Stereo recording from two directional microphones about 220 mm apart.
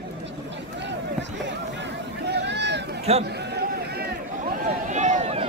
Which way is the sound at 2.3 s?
50° right (ahead or behind).